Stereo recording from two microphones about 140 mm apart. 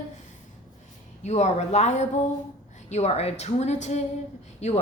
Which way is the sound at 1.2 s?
55° left (ahead or behind).